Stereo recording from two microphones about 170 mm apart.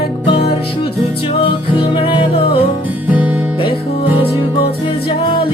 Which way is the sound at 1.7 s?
30° left (ahead or behind).